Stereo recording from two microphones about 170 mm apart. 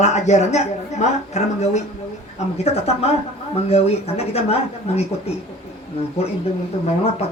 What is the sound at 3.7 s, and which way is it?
Speech, 35° left (ahead or behind).